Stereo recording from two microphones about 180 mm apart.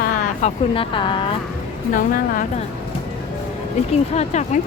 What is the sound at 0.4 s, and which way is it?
Speech, 30° left (ahead or behind).